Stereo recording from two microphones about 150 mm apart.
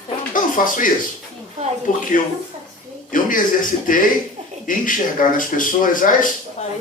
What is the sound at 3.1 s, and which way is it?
Speech, 65° left (ahead or behind).